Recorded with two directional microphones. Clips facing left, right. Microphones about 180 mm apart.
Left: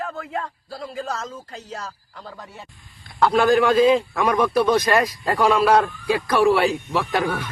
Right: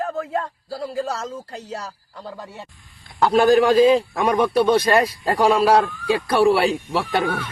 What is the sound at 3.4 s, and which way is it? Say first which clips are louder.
A man's voice: right 3 dB; 35° right (ahead or behind).